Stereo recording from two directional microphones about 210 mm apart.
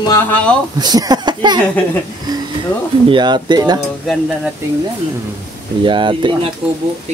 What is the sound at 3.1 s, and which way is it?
Speech, 20° right (ahead or behind).